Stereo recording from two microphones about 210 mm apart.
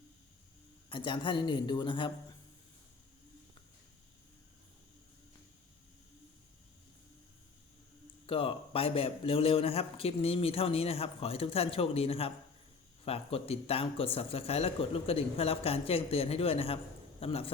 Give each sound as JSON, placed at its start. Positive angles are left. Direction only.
{"t": 0.9, "sound": "speech", "side_deg": 25}
{"t": 8.3, "sound": "speech", "side_deg": 25}